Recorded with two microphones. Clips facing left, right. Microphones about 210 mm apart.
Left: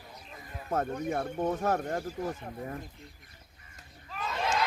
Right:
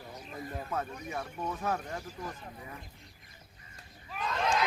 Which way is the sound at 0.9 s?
55° left (ahead or behind).